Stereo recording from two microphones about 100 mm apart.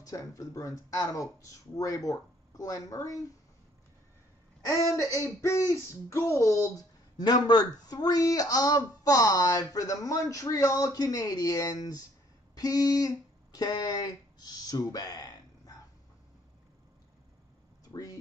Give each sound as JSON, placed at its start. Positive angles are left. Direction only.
{"t": 0.0, "sound": "speech", "side_deg": 30}
{"t": 4.6, "sound": "speech", "side_deg": 30}